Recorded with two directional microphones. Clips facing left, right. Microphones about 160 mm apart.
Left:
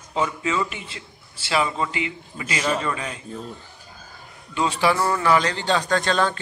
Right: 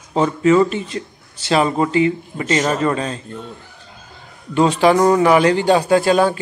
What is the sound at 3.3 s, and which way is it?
Speech, 5° left (ahead or behind).